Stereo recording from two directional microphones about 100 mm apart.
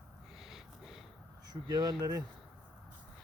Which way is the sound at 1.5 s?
45° right (ahead or behind).